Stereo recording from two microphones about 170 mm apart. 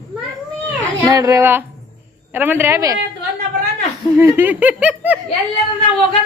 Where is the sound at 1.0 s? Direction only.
20° right (ahead or behind).